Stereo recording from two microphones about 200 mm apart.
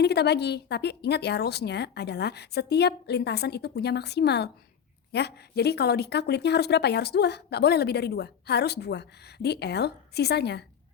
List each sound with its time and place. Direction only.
0.0 s speech: 55° left (ahead or behind)